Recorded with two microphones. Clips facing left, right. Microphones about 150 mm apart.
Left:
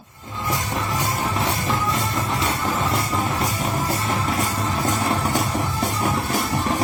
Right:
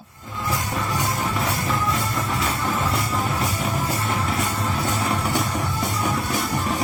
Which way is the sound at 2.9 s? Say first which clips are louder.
Left 1 dB; 30° left (ahead or behind).